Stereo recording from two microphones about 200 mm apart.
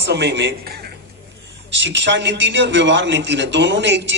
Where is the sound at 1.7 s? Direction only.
65° right (ahead or behind).